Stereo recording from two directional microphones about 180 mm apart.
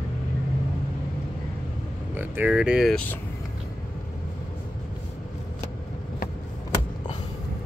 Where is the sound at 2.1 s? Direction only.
10° right (ahead or behind).